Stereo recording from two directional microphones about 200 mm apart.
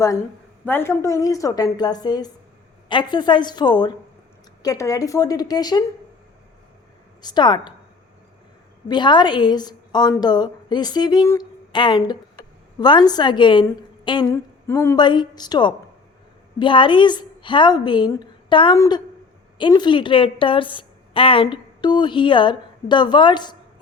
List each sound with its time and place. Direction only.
0.6 s a woman's voice: 10° left (ahead or behind)
7.2 s a woman's voice: 20° left (ahead or behind)
8.9 s a woman's voice: 20° left (ahead or behind)